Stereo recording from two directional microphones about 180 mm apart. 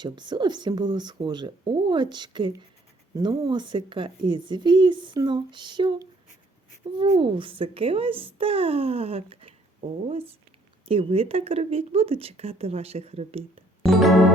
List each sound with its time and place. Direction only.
0.0 s speech: 25° right (ahead or behind)
10.8 s speech: 30° right (ahead or behind)
13.8 s music: centre (ahead or behind)